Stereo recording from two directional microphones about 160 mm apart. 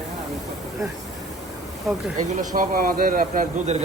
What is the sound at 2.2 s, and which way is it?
A man's voice, 50° right (ahead or behind).